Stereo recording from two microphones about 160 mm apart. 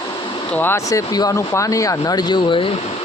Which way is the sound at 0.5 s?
15° left (ahead or behind).